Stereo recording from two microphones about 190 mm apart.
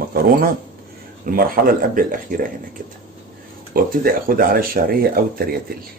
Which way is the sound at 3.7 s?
50° right (ahead or behind).